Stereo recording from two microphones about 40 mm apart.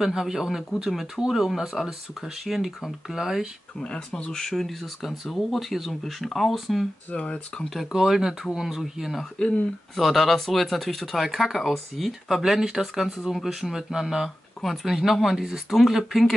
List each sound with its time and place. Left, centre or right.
0.0 s speech: centre
3.8 s speech: left; by 6.9 s centre
7.2 s speech: left
7.9 s speech: centre
12.4 s speech: centre
14.6 s speech: centre